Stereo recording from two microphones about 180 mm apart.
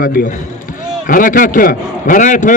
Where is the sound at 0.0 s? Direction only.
50° left (ahead or behind).